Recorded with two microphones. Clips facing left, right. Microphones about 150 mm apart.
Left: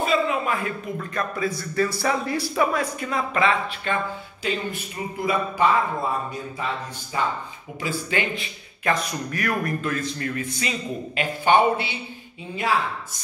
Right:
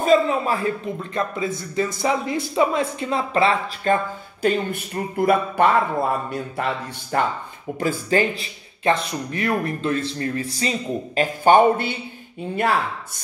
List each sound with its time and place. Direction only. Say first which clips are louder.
0.0 s a man's voice: right 5 dB; 40° right (ahead or behind); by 7.2 s 60° right (ahead or behind)
7.8 s a man's voice: right 6 dB; 40° right (ahead or behind)